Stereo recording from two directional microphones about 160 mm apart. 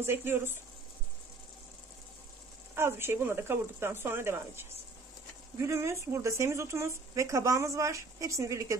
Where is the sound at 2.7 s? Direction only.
15° right (ahead or behind).